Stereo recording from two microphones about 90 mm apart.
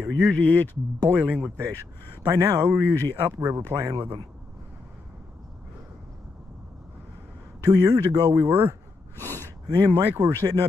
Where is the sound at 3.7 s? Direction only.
25° right (ahead or behind).